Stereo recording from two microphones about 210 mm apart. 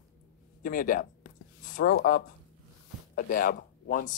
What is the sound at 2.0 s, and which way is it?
Speech, 50° left (ahead or behind).